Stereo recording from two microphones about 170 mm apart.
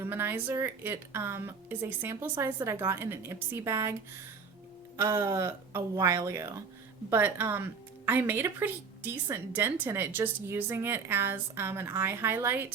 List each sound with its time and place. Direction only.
0.0 s a woman's voice: 10° right (ahead or behind)
4.9 s a woman's voice: 15° right (ahead or behind)